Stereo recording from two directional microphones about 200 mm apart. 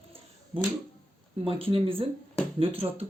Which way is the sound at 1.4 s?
30° right (ahead or behind).